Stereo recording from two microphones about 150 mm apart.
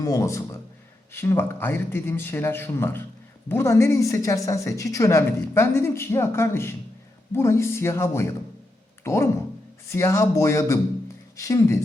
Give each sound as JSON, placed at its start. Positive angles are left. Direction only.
{"t": 0.0, "sound": "a woman's voice", "side_deg": 20}